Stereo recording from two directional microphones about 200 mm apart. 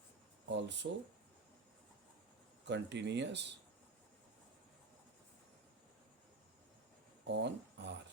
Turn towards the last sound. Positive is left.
turn(degrees=-60)  # may be behind; listen again after turning